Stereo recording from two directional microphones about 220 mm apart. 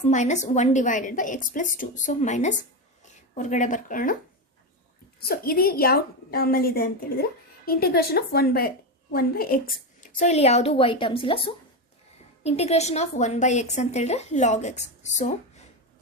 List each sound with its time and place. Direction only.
0.0 s a woman's voice: 35° left (ahead or behind)
5.3 s a woman's voice: 45° left (ahead or behind)